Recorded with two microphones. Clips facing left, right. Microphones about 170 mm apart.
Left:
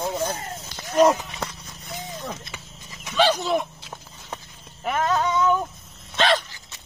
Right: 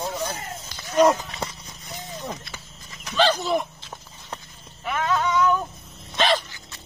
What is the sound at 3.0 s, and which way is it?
Speech, 5° left (ahead or behind).